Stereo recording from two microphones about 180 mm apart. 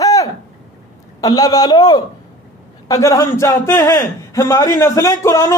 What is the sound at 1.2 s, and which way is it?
A man's voice, 20° left (ahead or behind).